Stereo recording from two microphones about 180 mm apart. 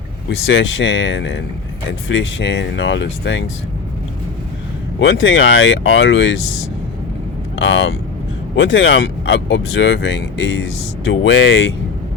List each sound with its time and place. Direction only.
0.3 s speech: 90° left
4.9 s speech: 90° left
7.5 s speech: 90° left